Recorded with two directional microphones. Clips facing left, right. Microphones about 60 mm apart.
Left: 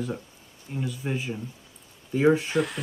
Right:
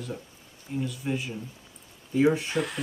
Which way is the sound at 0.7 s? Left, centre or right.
Centre.